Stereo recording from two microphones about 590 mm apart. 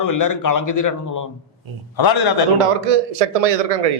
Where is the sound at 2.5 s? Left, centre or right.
Right.